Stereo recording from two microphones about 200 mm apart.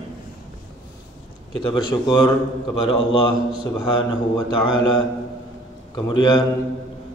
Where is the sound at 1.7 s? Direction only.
25° left (ahead or behind).